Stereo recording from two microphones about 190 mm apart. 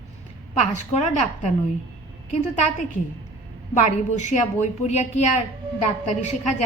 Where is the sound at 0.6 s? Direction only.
35° left (ahead or behind).